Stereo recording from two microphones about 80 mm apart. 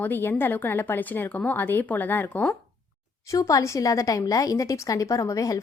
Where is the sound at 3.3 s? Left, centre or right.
Left.